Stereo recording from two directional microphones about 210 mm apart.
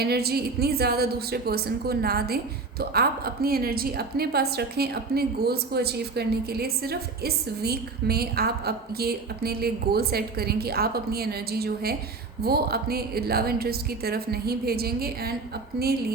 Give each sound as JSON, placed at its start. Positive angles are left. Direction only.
{"t": 0.0, "sound": "a woman's voice", "side_deg": -50}